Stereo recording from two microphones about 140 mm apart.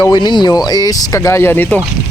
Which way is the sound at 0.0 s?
30° left (ahead or behind).